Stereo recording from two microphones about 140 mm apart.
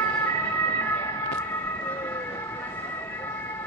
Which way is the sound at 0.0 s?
20° left (ahead or behind).